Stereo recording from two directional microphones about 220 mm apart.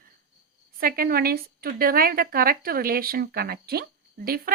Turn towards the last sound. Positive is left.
turn(degrees=-40)  # may be behind; listen again after turning